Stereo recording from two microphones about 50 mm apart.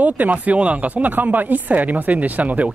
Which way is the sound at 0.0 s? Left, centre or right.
Right.